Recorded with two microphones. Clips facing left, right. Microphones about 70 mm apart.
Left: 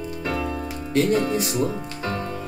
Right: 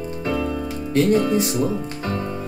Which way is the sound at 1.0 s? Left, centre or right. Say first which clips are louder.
Right 3 dB; left.